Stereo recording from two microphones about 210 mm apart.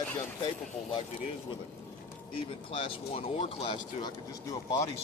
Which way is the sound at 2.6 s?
25° left (ahead or behind).